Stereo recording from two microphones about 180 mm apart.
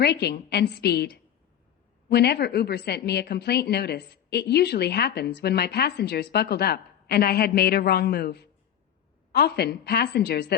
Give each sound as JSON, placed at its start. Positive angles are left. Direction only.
{"t": 0.0, "sound": "a woman's voice", "side_deg": 65}